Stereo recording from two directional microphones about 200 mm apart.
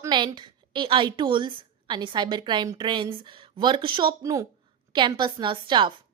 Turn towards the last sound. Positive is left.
turn(degrees=-25)  # may be behind; listen again after turning